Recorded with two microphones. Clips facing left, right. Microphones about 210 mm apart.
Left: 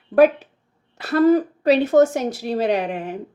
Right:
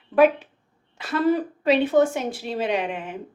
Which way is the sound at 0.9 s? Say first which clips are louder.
Left 6 dB; 40° left (ahead or behind).